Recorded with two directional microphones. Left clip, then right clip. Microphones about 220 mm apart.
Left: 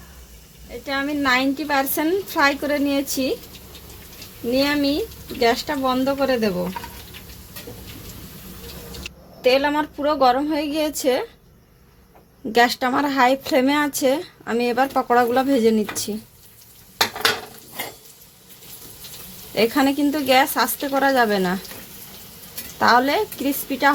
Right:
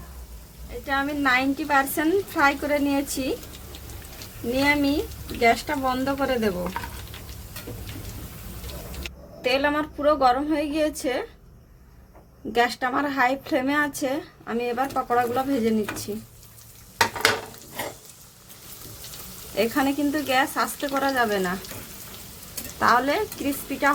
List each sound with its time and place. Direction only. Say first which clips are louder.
0.9 s a woman's voice: left 2 dB; 30° left (ahead or behind)
4.5 s a woman's voice: left 2 dB; 30° left (ahead or behind)
9.4 s a woman's voice: left 5 dB; 30° left (ahead or behind)
12.5 s a woman's voice: left 5 dB; 35° left (ahead or behind)
19.5 s a woman's voice: left 5 dB; 35° left (ahead or behind)
22.8 s a woman's voice: left 4 dB; 30° left (ahead or behind)